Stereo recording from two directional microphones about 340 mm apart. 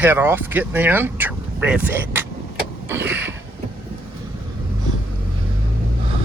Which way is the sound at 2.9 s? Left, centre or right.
Centre.